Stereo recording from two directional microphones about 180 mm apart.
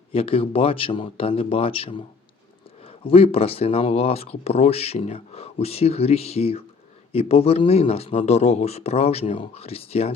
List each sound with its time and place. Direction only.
0.1 s speech: 30° left (ahead or behind)